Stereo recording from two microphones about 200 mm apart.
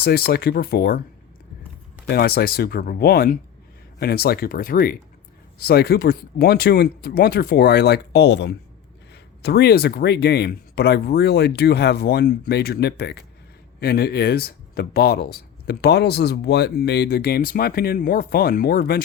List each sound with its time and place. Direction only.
0.3 s speech: 50° left (ahead or behind)
2.0 s speech: 50° left (ahead or behind)